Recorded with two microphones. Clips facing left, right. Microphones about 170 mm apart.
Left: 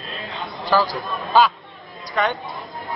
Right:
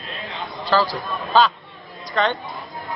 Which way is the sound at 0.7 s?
15° left (ahead or behind).